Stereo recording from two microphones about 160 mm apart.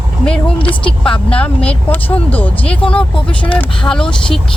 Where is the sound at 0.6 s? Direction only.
5° left (ahead or behind).